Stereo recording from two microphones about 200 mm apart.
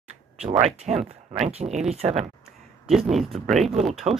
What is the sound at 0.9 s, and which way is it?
Speech, centre (ahead or behind).